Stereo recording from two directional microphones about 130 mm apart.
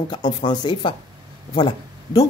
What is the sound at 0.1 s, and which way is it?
Speech, 35° left (ahead or behind).